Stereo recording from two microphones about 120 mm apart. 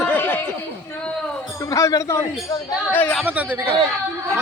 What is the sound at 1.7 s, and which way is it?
Speech, 25° left (ahead or behind).